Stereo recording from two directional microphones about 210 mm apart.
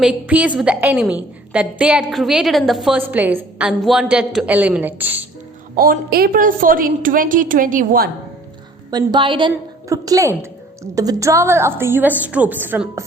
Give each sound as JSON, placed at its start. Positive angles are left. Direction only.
{"t": 0.0, "sound": "a woman's voice", "side_deg": -5}
{"t": 5.7, "sound": "a woman's voice", "side_deg": -45}
{"t": 8.9, "sound": "a woman's voice", "side_deg": -20}